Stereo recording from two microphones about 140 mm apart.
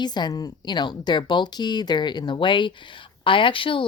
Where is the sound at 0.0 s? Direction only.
30° left (ahead or behind).